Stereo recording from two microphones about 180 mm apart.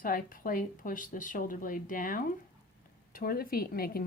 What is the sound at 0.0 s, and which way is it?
A woman's voice, 50° left (ahead or behind).